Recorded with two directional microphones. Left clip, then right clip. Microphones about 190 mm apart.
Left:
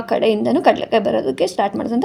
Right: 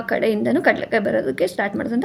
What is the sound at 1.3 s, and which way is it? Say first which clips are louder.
Speech: left 3 dB; 15° left (ahead or behind).